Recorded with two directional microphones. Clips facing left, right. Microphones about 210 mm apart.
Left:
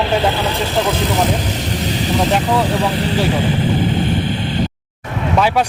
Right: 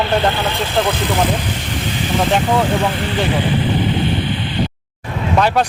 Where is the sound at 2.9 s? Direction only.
35° left (ahead or behind).